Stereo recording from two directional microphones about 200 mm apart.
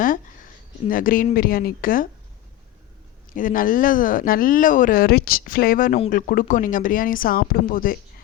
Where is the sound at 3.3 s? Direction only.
40° left (ahead or behind).